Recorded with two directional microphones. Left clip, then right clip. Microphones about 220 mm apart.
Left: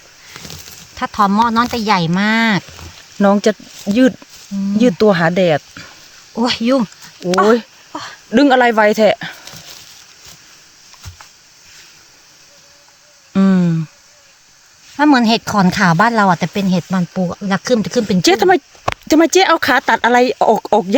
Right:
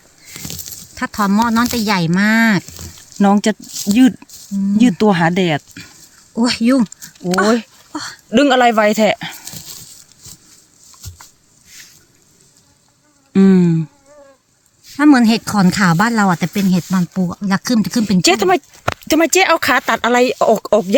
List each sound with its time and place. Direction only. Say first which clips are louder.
0.3 s a sound: right 3 dB; 5° left (ahead or behind)
0.9 s speech: left 3 dB; 35° left (ahead or behind)
3.2 s speech: left 2 dB; 15° left (ahead or behind)
4.8 s speech: left 2 dB; 15° left (ahead or behind)
6.3 s speech: even; 35° left (ahead or behind)
7.9 s a sound: right 1 dB; 25° left (ahead or behind)
8.3 s speech: left 1 dB; 10° left (ahead or behind)
13.3 s a sound: right 3 dB; 15° left (ahead or behind)
14.9 s speech: even; 40° left (ahead or behind)
18.2 s speech: left 1 dB; 10° left (ahead or behind)